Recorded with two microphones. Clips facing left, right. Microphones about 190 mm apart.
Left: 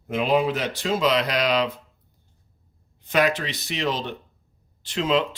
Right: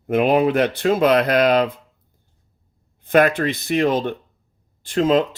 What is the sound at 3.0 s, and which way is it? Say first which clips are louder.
Speech: right 6 dB; 55° right (ahead or behind).